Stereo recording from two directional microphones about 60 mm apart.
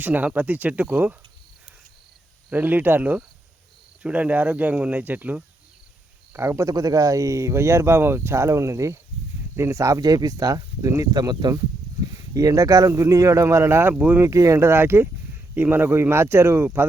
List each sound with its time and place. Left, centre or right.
0.0 s speech: right
2.5 s speech: right
6.3 s speech: right
6.7 s speech: right
13.9 s speech: right
14.2 s speech: right